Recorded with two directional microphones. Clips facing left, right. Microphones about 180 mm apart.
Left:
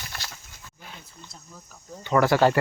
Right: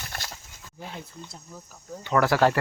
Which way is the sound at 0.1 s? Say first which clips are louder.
Right 2 dB; 55° right (ahead or behind).